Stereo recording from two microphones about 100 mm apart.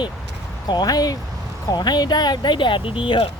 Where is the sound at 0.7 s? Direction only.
40° left (ahead or behind).